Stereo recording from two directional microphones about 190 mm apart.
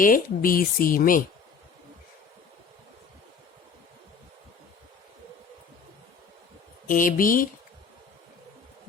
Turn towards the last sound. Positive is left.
turn(degrees=45)  # may be behind; listen again after turning